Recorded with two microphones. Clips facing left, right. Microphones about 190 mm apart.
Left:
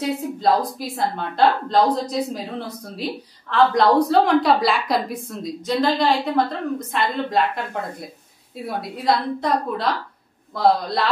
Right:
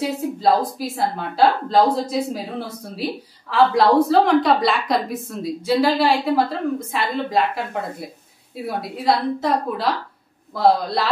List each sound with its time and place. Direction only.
0.7 s a woman's voice: 5° right (ahead or behind)
8.6 s a woman's voice: centre (ahead or behind)